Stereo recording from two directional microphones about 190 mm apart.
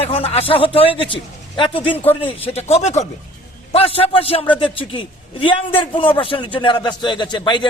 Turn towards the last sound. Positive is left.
turn(degrees=25)  # may be behind; listen again after turning